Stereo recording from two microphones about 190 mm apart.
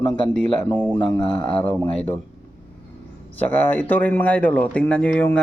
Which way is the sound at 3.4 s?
10° left (ahead or behind).